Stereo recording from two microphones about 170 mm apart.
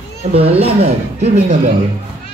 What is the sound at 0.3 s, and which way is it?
Speech, 35° right (ahead or behind).